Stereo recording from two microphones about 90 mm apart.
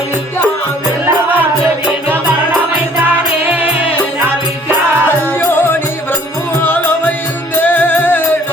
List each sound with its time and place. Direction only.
1.0 s music: 20° right (ahead or behind)
3.1 s music: 20° right (ahead or behind)
5.4 s music: 25° left (ahead or behind)